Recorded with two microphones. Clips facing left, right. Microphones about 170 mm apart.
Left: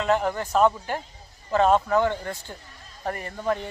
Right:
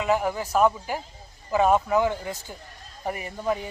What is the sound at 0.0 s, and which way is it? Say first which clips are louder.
Speech: left 1 dB; 5° right (ahead or behind).